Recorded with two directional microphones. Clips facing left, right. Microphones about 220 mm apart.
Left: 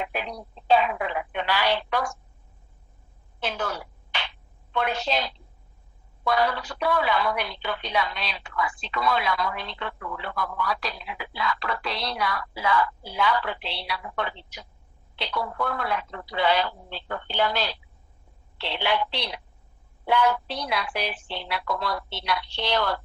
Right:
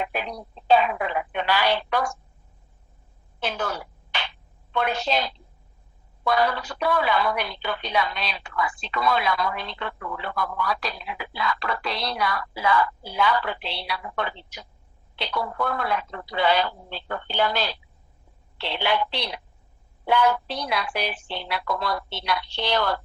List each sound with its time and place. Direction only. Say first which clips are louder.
0.0 s telephone: right 2 dB; 45° right (ahead or behind)
3.4 s a sound: right 1 dB; 45° right (ahead or behind)
4.7 s a woman's voice: right 2 dB; 45° right (ahead or behind)